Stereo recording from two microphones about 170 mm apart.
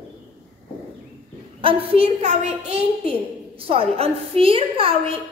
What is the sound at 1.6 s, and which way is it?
A woman's voice, 35° right (ahead or behind).